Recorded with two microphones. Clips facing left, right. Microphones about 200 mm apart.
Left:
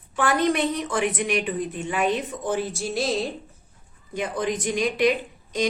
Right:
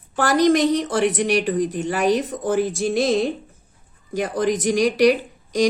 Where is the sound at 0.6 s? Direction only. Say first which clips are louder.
Right 6 dB; 75° right (ahead or behind).